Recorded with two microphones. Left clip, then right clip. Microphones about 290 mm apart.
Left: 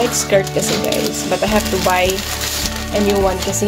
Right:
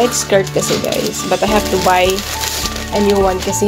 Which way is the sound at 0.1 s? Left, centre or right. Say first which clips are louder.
Right 1 dB; right.